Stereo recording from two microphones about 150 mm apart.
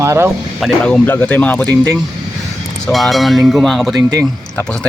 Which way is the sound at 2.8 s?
Centre (ahead or behind).